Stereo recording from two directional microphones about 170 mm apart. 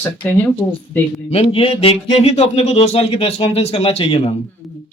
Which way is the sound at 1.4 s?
35° left (ahead or behind).